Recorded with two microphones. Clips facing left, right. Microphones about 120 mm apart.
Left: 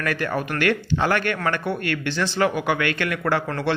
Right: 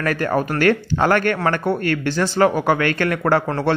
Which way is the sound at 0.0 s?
40° right (ahead or behind).